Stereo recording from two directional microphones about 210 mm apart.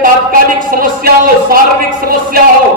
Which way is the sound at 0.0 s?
40° right (ahead or behind).